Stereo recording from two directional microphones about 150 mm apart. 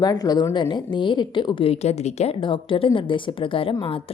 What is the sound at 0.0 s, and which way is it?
A woman's voice, 25° left (ahead or behind).